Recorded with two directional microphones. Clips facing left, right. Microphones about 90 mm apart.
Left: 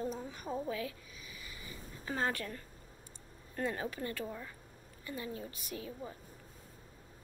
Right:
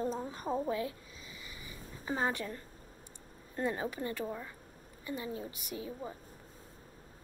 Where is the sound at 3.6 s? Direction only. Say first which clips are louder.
Right 2 dB; 15° right (ahead or behind).